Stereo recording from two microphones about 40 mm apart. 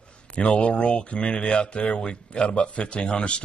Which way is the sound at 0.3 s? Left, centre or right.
Left.